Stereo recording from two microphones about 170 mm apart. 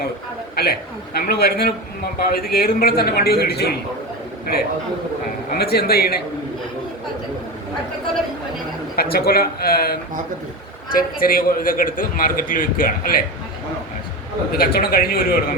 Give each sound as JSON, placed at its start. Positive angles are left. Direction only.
{"t": 0.5, "sound": "a man's voice", "side_deg": 65}
{"t": 5.5, "sound": "a man's voice", "side_deg": 65}
{"t": 9.0, "sound": "a man's voice", "side_deg": 60}
{"t": 14.5, "sound": "a man's voice", "side_deg": 60}